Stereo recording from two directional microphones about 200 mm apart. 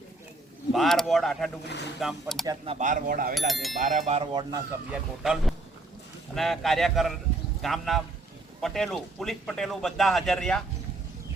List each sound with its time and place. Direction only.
0.7 s speech: centre (ahead or behind)
1.6 s speech: 60° left (ahead or behind)
2.0 s speech: centre (ahead or behind)
2.5 s speech: 30° right (ahead or behind)
3.3 s speech: centre (ahead or behind)
3.8 s speech: 35° right (ahead or behind)
4.9 s speech: centre (ahead or behind)